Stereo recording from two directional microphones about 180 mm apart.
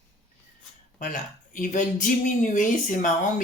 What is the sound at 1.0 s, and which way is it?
Speech, 45° left (ahead or behind).